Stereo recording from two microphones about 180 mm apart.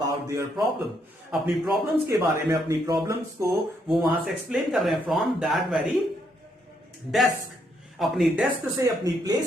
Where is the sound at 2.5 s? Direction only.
20° right (ahead or behind).